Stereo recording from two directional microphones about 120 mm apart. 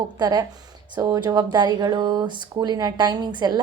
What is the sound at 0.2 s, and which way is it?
Speech, 35° right (ahead or behind).